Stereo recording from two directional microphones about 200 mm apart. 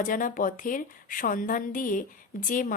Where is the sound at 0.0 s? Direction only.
40° left (ahead or behind).